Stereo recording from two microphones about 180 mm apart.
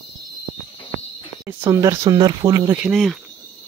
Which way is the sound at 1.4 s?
15° right (ahead or behind).